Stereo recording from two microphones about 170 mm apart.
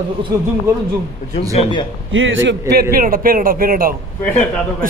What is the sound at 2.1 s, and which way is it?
Speech, 90° right.